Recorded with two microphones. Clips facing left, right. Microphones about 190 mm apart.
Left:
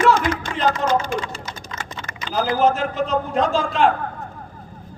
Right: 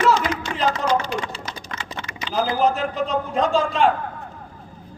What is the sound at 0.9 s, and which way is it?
Typing, 50° left (ahead or behind).